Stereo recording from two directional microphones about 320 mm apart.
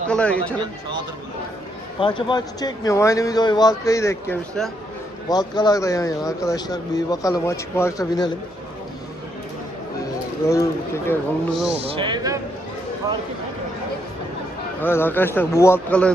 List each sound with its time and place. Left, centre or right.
0.1 s speech: centre
2.0 s a man's voice: centre
10.5 s a man's voice: centre
11.8 s speech: centre
14.8 s a man's voice: centre